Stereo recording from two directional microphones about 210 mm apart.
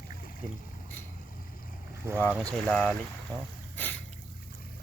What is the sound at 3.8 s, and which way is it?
Boat, 10° left (ahead or behind).